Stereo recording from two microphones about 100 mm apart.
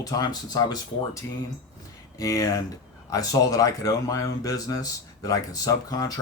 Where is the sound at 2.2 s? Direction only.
35° left (ahead or behind).